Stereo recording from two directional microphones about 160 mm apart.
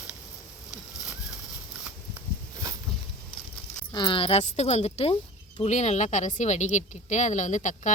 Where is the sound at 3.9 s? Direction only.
30° left (ahead or behind).